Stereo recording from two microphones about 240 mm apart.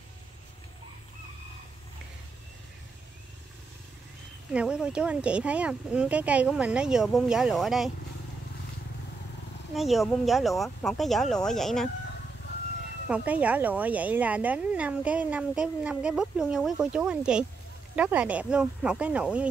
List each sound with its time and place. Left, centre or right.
4.6 s a woman's voice: centre
9.8 s a woman's voice: centre
13.1 s a woman's voice: centre